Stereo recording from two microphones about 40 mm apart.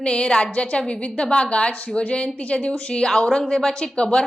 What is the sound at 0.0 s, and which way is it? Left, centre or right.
A woman's voice, left.